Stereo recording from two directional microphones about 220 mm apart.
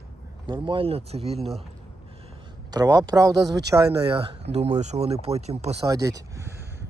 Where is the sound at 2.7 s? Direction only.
15° right (ahead or behind).